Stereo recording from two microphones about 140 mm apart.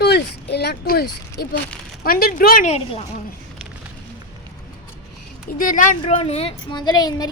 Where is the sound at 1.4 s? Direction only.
90° left.